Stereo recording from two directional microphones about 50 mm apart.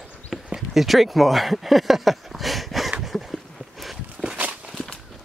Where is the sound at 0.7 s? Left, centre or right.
Centre.